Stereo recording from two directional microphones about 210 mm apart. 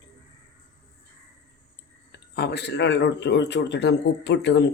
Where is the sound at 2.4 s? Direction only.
50° left (ahead or behind).